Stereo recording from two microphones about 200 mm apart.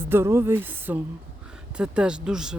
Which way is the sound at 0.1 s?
10° right (ahead or behind).